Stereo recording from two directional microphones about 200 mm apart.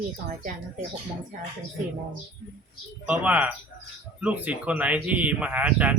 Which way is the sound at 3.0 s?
5° right (ahead or behind).